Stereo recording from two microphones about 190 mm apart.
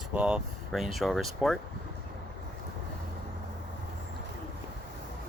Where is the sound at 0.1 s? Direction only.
5° right (ahead or behind).